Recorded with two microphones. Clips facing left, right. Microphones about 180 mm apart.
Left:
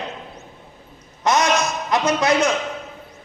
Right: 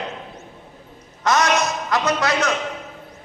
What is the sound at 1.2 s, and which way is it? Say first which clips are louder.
A man's voice: even; 20° left (ahead or behind).